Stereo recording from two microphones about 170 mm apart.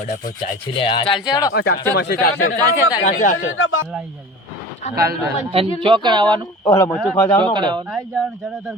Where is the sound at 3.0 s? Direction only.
50° left (ahead or behind).